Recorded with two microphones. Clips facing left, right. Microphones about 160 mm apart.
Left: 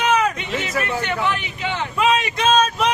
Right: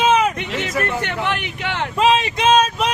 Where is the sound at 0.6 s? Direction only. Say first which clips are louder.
Right 2 dB; 65° right (ahead or behind).